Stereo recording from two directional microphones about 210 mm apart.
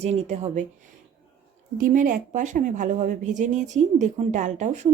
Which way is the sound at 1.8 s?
40° right (ahead or behind).